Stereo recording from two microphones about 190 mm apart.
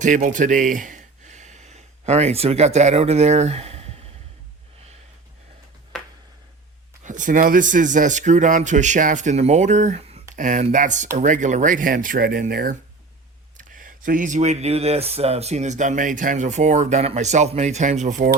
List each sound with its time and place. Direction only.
0.0 s speech: 40° right (ahead or behind)
7.0 s speech: 40° right (ahead or behind)
10.3 s speech: 45° right (ahead or behind)